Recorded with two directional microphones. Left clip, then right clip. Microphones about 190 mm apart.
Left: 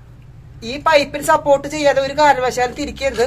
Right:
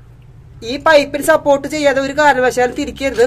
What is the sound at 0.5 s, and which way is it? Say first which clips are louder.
Speech: right 3 dB; 40° right (ahead or behind).